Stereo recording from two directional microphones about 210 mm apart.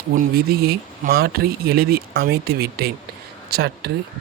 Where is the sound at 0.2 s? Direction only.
45° right (ahead or behind).